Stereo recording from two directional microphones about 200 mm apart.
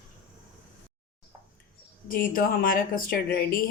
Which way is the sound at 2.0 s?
45° left (ahead or behind).